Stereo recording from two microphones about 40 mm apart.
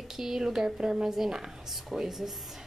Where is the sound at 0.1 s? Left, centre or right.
Centre.